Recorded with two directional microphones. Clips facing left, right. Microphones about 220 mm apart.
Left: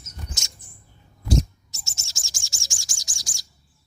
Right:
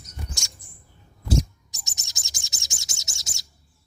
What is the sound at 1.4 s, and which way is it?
Bird, 15° right (ahead or behind).